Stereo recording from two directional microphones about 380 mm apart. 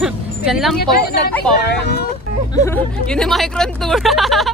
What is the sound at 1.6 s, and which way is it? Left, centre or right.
Speech, left.